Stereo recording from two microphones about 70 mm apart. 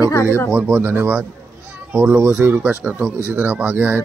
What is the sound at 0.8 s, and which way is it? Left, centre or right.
Speech, right.